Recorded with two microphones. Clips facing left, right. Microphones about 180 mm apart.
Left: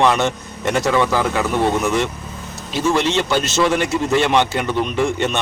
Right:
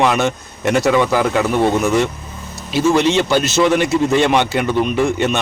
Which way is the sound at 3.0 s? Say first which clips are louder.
Right 4 dB; 15° right (ahead or behind).